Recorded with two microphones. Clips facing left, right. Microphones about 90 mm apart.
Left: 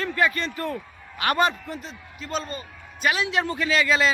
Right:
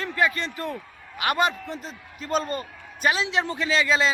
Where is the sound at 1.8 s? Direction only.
40° right (ahead or behind).